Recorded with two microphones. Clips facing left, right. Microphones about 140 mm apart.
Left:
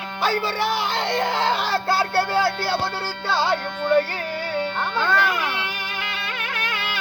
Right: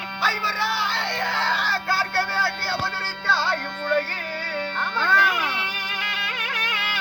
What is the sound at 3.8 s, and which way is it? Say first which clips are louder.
Music: left 5 dB; 20° left (ahead or behind).